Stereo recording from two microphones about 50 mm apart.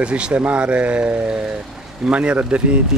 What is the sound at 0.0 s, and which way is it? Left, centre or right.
Speech, right.